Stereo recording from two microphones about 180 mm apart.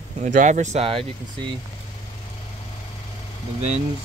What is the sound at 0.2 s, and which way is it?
Speech, 45° right (ahead or behind).